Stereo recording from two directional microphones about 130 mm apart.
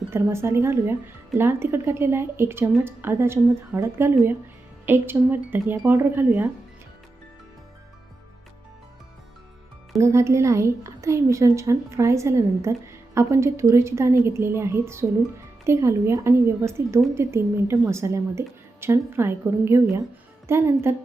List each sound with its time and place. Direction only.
0.1 s a woman's voice: 20° right (ahead or behind)
10.0 s a woman's voice: 20° right (ahead or behind)